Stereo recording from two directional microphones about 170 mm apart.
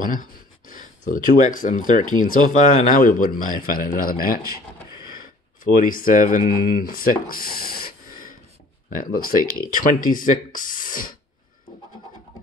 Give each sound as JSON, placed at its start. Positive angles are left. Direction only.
{"t": 0.0, "sound": "a sound", "side_deg": 50}
{"t": 1.5, "sound": "a man's voice", "side_deg": 50}
{"t": 5.6, "sound": "a man's voice", "side_deg": 55}
{"t": 8.9, "sound": "a man's voice", "side_deg": 55}